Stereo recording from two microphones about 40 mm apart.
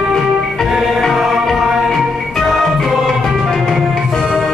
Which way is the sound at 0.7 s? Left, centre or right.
Centre.